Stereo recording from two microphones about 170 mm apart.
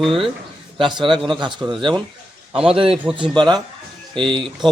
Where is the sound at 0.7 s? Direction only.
30° right (ahead or behind).